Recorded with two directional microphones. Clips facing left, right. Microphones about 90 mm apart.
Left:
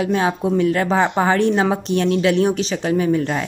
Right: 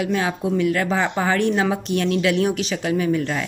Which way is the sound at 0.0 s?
30° left (ahead or behind).